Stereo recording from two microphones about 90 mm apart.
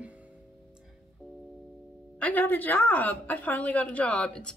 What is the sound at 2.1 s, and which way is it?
A woman's voice, 15° left (ahead or behind).